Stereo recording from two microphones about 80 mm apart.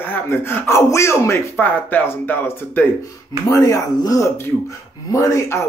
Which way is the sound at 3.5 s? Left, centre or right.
Left.